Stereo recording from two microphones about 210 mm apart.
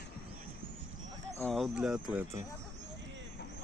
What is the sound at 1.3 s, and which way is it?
Speech, centre (ahead or behind).